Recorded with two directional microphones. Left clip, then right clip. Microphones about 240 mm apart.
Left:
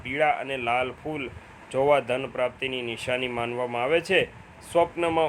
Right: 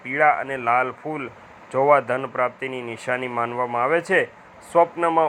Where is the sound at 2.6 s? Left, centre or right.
Right.